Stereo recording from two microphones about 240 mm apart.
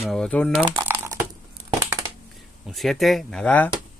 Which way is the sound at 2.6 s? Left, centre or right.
Centre.